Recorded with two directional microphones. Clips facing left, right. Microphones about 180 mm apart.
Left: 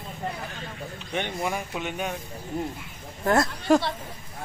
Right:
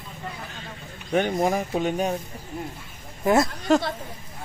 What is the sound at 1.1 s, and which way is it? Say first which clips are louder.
Speech: right 8 dB; 45° right (ahead or behind).